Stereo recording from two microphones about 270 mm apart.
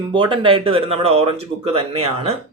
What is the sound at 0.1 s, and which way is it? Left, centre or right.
Speech, centre.